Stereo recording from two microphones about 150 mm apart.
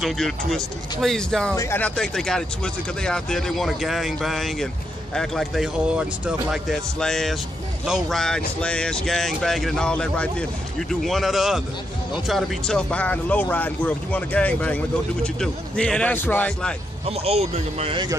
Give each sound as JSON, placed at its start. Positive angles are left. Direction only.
{"t": 0.0, "sound": "speech", "side_deg": 0}
{"t": 1.6, "sound": "speech", "side_deg": 15}
{"t": 2.0, "sound": "speech", "side_deg": 5}
{"t": 17.1, "sound": "speech", "side_deg": -40}